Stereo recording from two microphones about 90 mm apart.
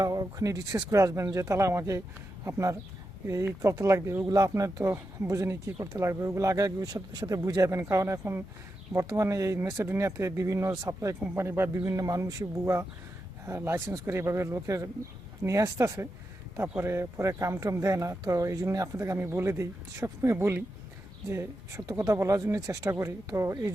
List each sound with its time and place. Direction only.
0.0 s speech: 45° right (ahead or behind)